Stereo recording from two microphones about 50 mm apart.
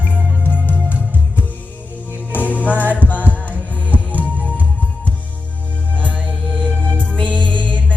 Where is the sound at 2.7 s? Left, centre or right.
Right.